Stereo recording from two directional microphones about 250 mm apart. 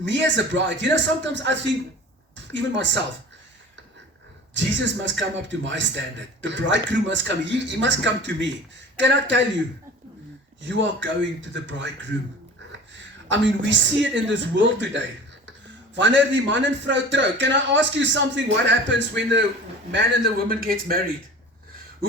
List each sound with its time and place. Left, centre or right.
0.0 s a man's voice: right
4.5 s a man's voice: right
10.6 s a man's voice: right
13.2 s a man's voice: right
16.0 s a man's voice: right